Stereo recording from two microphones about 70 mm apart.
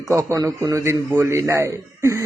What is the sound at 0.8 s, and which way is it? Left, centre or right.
A man's voice, right.